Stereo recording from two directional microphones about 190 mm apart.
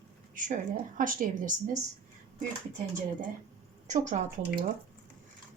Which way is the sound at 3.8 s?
40° right (ahead or behind).